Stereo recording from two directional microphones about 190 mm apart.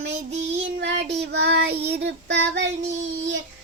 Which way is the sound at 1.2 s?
60° right (ahead or behind).